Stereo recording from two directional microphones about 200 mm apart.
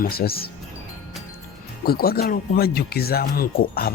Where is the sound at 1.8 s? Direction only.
50° left (ahead or behind).